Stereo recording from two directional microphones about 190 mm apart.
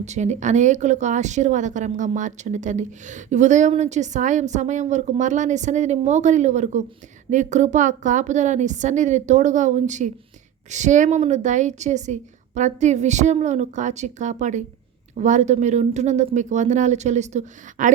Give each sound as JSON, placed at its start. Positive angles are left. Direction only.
{"t": 0.0, "sound": "speech", "side_deg": -35}